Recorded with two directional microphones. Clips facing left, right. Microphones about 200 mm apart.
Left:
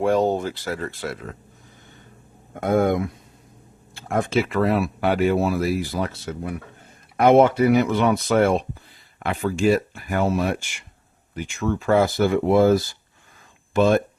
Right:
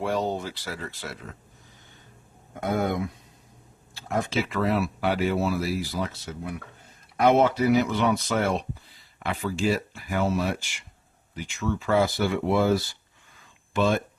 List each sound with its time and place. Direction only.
0.0 s speech: 50° left (ahead or behind)
2.6 s speech: 50° left (ahead or behind)